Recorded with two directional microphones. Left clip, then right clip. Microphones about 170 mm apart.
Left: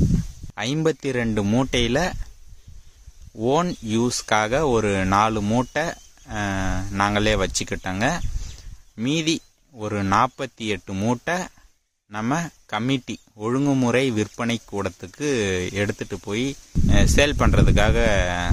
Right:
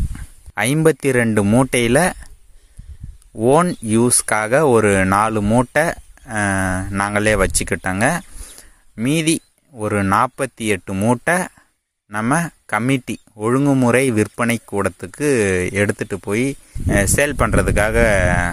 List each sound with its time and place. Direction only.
0.6 s speech: 45° right (ahead or behind)
1.4 s speech: 30° right (ahead or behind)
1.7 s speech: 45° right (ahead or behind)
3.3 s speech: 40° right (ahead or behind)
5.4 s speech: 30° right (ahead or behind)
5.7 s speech: 45° right (ahead or behind)
13.6 s speech: 30° right (ahead or behind)